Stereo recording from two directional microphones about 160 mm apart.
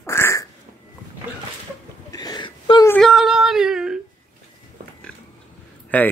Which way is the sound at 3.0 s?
Centre (ahead or behind).